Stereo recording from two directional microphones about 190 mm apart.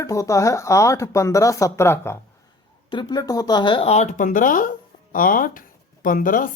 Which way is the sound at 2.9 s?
25° left (ahead or behind).